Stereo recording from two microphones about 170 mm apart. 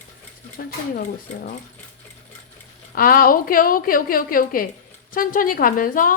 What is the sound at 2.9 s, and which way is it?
A woman's voice, 60° left (ahead or behind).